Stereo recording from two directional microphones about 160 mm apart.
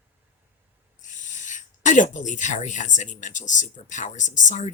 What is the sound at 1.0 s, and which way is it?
Speech, 50° left (ahead or behind).